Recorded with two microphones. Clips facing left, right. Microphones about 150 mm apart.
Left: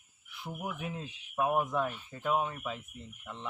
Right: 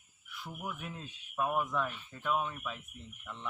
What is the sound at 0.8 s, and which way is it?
Speech, 15° left (ahead or behind).